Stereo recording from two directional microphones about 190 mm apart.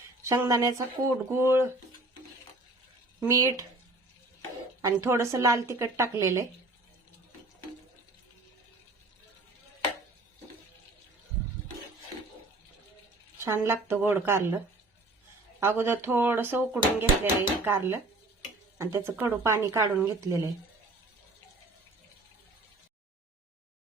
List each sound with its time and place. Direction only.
0.2 s speech: 15° right (ahead or behind)
3.2 s speech: 15° right (ahead or behind)
4.8 s speech: 15° right (ahead or behind)
13.4 s speech: 15° right (ahead or behind)
15.6 s speech: 10° right (ahead or behind)